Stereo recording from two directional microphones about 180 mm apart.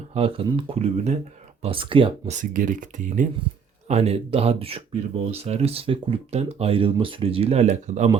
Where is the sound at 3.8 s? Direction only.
35° right (ahead or behind).